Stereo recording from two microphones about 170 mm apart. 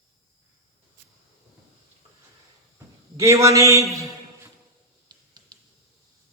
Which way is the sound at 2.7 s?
15° right (ahead or behind).